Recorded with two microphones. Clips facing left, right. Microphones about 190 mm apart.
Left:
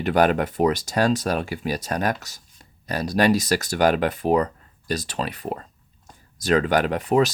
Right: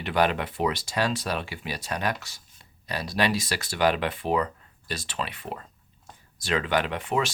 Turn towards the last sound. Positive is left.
turn(degrees=40)  # may be behind; listen again after turning